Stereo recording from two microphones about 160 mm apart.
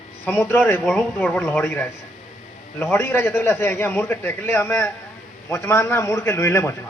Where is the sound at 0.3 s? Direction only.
15° left (ahead or behind).